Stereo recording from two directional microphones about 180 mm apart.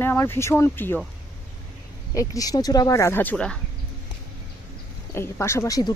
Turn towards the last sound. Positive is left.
turn(degrees=20)  # may be behind; listen again after turning